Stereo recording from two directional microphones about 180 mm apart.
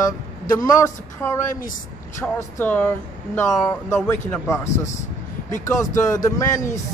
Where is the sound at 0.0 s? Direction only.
20° left (ahead or behind).